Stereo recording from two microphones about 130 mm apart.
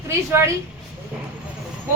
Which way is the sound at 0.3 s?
20° right (ahead or behind).